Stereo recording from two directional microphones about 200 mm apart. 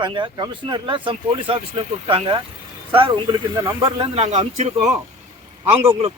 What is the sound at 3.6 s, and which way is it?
Speech, 25° right (ahead or behind).